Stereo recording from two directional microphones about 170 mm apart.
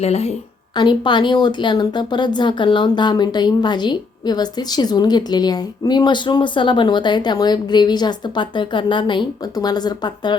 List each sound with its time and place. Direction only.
0.0 s a woman's voice: 40° left (ahead or behind)
0.8 s speech: 25° left (ahead or behind)